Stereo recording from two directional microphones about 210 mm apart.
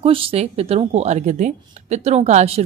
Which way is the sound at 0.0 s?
25° right (ahead or behind).